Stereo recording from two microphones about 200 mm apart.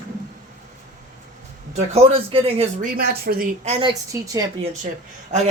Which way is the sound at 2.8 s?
50° right (ahead or behind).